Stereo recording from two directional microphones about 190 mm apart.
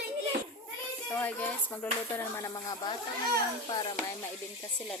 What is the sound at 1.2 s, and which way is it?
Speech, 10° left (ahead or behind).